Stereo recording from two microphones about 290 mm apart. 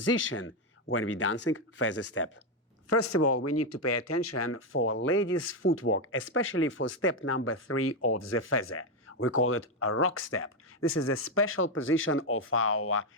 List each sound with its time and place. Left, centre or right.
0.0 s speech: left
10.8 s speech: left
11.0 s speech: left